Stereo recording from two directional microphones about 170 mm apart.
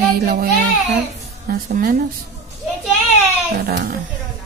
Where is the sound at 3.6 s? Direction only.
65° right (ahead or behind).